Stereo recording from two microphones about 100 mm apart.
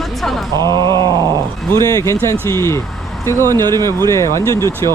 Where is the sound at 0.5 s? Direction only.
45° right (ahead or behind).